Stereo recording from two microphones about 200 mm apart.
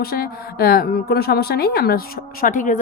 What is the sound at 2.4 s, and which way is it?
Speech, 40° left (ahead or behind).